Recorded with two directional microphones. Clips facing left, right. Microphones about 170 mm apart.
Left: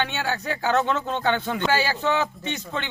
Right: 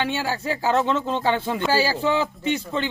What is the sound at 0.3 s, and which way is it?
A man's voice, 30° right (ahead or behind).